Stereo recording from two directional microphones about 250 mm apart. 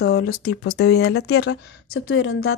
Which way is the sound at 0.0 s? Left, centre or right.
Left.